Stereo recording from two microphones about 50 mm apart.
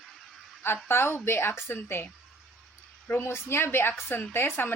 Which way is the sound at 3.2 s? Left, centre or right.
Left.